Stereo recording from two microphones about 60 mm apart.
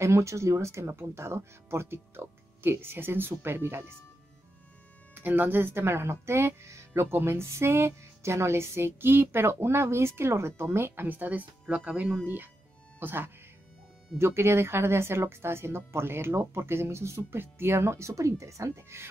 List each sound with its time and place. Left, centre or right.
0.0 s speech: right
5.1 s speech: right
11.1 s speech: right
13.0 s speech: right